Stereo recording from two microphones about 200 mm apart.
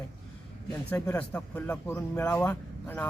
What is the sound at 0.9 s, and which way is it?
Speech, 5° left (ahead or behind).